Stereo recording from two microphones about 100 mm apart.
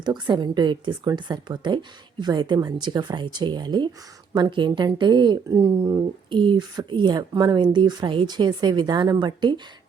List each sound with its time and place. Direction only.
0.0 s speech: 45° right (ahead or behind)
5.5 s speech: 35° right (ahead or behind)
6.3 s speech: 55° right (ahead or behind)